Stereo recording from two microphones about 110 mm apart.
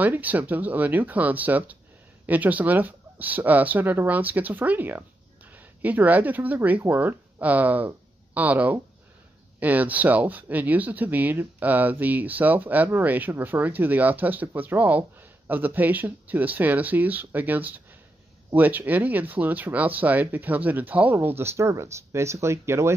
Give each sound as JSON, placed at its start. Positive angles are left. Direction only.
{"t": 0.0, "sound": "speech", "side_deg": -15}